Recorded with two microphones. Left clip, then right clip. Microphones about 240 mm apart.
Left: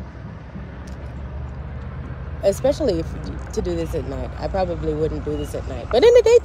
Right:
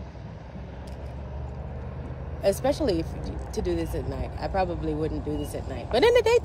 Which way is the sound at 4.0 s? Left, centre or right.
Left.